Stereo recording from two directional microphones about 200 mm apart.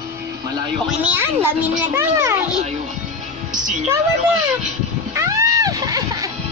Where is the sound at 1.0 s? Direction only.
10° right (ahead or behind).